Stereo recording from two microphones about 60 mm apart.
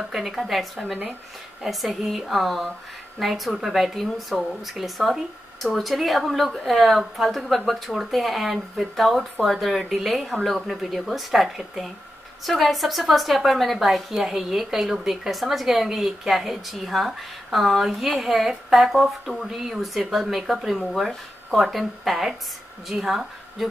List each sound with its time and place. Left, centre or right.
0.1 s a woman's voice: centre